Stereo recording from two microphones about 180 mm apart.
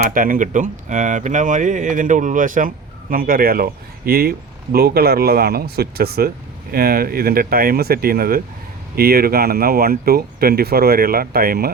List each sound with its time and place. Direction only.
0.1 s speech: 50° right (ahead or behind)